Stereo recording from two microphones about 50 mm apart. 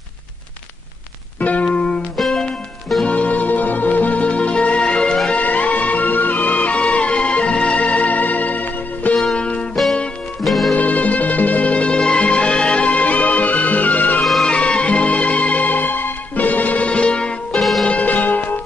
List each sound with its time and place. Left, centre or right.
1.4 s music: left
2.1 s music: centre
3.1 s music: left
9.1 s music: centre
10.4 s music: centre
10.7 s music: left
14.4 s music: left
17.5 s music: centre
17.8 s music: left